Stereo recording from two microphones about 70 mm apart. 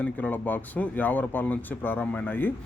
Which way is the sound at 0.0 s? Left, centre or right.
Left.